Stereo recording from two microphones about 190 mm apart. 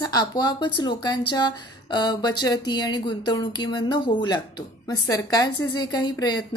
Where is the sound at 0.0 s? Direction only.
20° left (ahead or behind).